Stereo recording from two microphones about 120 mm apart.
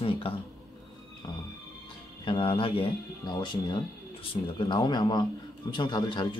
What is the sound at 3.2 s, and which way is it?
Speech, 35° left (ahead or behind).